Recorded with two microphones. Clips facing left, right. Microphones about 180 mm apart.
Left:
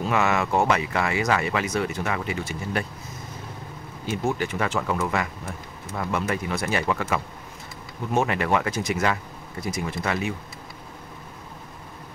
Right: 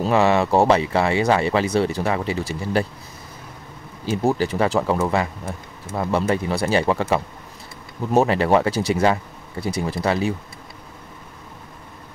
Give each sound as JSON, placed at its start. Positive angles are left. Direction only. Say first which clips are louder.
{"t": 0.0, "sound": "speech", "louder": "right 6 dB", "side_deg": -30}
{"t": 4.0, "sound": "speech", "louder": "right 6 dB", "side_deg": -35}